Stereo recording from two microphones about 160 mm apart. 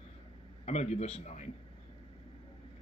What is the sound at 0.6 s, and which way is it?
Speech, 45° left (ahead or behind).